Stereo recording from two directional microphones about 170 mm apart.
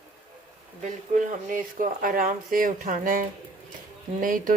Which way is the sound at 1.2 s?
55° right (ahead or behind).